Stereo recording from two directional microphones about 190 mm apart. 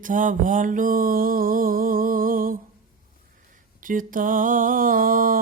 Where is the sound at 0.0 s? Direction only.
45° right (ahead or behind).